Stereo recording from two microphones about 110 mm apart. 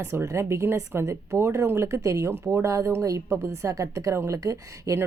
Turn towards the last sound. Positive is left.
turn(degrees=-30)  # may be behind; listen again after turning